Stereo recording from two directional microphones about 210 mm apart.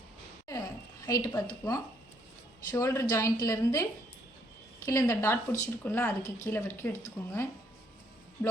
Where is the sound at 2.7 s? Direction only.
15° left (ahead or behind).